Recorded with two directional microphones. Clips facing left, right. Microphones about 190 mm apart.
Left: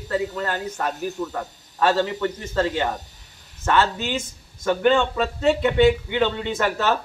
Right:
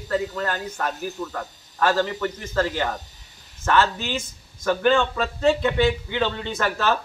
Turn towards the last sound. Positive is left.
turn(degrees=20)  # may be behind; listen again after turning